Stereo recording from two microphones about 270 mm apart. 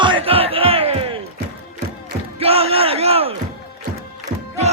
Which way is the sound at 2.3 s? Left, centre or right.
Right.